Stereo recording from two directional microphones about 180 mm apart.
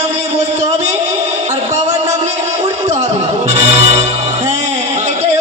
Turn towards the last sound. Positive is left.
turn(degrees=-35)  # may be behind; listen again after turning